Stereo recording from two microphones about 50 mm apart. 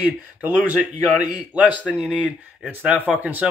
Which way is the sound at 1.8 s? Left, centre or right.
Left.